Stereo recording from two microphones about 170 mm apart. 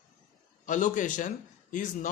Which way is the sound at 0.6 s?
50° left (ahead or behind).